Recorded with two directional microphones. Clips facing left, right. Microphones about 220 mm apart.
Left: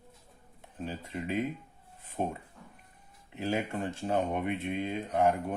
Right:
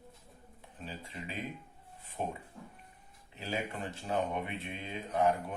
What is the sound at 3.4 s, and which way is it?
Speech, 50° left (ahead or behind).